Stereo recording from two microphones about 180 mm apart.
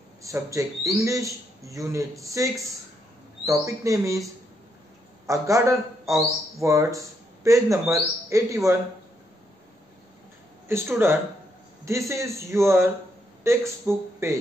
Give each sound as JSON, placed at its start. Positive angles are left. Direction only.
{"t": 0.2, "sound": "a man's voice", "side_deg": -15}
{"t": 5.2, "sound": "a man's voice", "side_deg": -15}
{"t": 10.7, "sound": "a man's voice", "side_deg": -15}